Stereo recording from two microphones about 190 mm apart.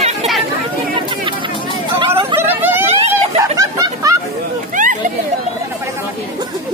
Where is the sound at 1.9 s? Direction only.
30° right (ahead or behind).